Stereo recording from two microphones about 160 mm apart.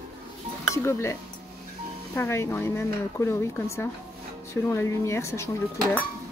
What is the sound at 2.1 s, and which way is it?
Speech, 15° left (ahead or behind).